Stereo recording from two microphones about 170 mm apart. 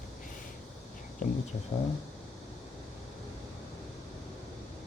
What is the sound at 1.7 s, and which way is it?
Speech, 30° left (ahead or behind).